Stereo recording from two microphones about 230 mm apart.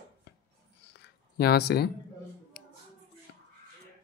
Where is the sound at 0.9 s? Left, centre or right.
Left.